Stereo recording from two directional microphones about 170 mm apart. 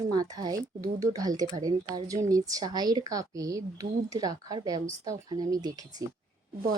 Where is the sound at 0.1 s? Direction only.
25° right (ahead or behind).